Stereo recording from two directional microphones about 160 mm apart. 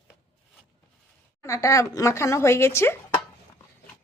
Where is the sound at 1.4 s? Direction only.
20° left (ahead or behind).